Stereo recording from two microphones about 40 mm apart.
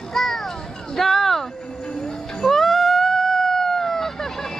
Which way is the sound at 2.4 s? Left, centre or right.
Centre.